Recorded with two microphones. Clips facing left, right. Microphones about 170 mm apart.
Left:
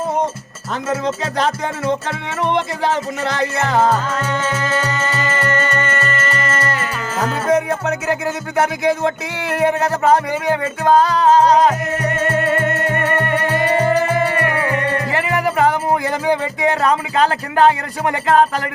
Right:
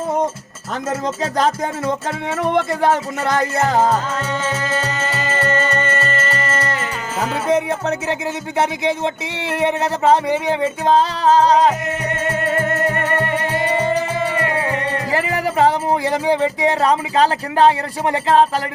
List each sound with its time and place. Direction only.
0.7 s music: 45° right (ahead or behind)
3.8 s music: 25° right (ahead or behind)
7.4 s speech: 30° right (ahead or behind)
14.4 s music: 25° right (ahead or behind)
14.9 s speech: 35° right (ahead or behind)